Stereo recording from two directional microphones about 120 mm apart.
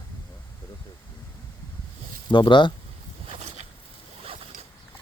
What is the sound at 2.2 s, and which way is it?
Speech, 40° left (ahead or behind).